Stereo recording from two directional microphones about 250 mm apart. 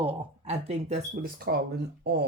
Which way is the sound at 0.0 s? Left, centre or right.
Right.